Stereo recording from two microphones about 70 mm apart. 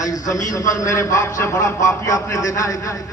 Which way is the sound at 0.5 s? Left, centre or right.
Left.